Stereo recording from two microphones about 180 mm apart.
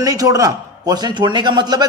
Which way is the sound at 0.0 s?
20° right (ahead or behind).